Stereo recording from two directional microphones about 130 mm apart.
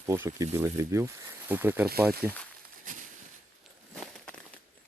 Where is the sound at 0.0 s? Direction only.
20° right (ahead or behind).